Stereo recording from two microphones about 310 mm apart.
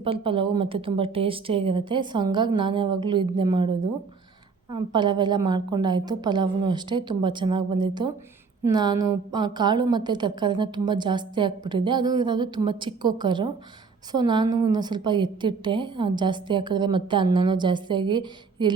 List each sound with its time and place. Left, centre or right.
0.0 s a woman's voice: centre